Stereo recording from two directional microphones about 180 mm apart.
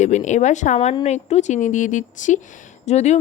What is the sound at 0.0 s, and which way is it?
A woman's voice, 40° left (ahead or behind).